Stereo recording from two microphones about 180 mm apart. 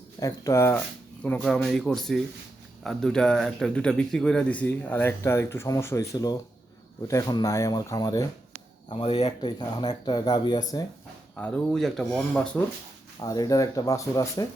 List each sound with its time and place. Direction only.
0.2 s a man's voice: 20° left (ahead or behind)
8.9 s speech: 35° left (ahead or behind)
9.6 s speech: 25° left (ahead or behind)
11.3 s speech: 5° left (ahead or behind)
13.1 s speech: 20° left (ahead or behind)